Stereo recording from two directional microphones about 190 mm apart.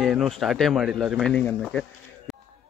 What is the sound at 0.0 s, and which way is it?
Speech, centre (ahead or behind).